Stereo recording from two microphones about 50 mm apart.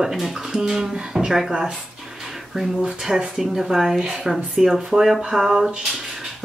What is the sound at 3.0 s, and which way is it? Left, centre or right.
Speech, centre.